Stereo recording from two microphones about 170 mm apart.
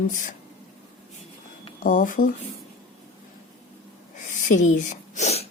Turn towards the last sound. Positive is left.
turn(degrees=40)  # may be behind; listen again after turning